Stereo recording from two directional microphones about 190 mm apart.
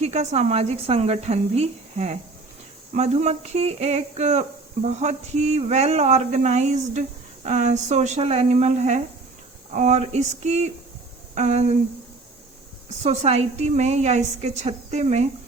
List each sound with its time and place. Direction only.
0.0 s speech: 35° right (ahead or behind)
13.0 s speech: 35° right (ahead or behind)